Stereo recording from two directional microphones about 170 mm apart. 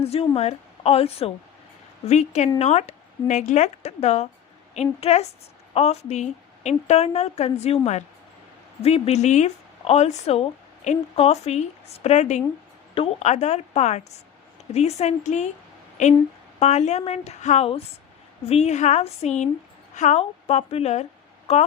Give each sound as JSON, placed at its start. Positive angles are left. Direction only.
{"t": 0.0, "sound": "a woman's voice", "side_deg": 35}